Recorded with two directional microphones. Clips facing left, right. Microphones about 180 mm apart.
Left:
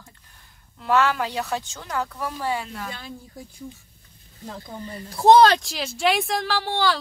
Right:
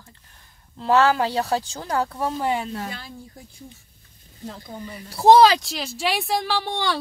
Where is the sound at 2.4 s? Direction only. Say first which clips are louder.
Right 1 dB; 20° right (ahead or behind).